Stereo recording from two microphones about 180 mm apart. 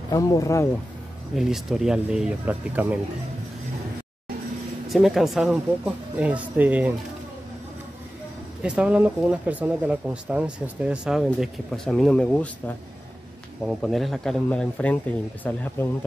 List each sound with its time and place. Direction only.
0.1 s speech: 20° left (ahead or behind)
1.3 s speech: centre (ahead or behind)
4.8 s speech: centre (ahead or behind)
8.6 s speech: 5° right (ahead or behind); by 16.1 s 10° left (ahead or behind)